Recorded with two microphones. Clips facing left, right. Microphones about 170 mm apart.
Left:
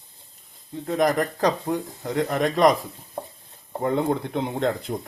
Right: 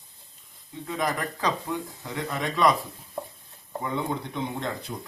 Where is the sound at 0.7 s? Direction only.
45° left (ahead or behind).